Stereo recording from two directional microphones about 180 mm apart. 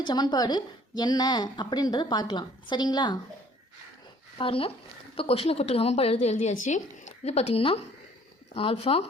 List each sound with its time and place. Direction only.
0.0 s a woman's voice: 25° left (ahead or behind)
4.4 s speech: 30° left (ahead or behind)